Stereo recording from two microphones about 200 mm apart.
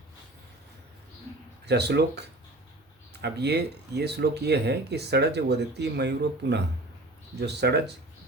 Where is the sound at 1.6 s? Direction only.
55° right (ahead or behind).